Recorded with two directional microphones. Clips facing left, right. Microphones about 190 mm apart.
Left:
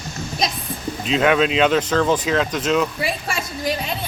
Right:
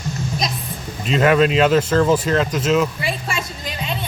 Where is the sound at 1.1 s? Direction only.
5° right (ahead or behind).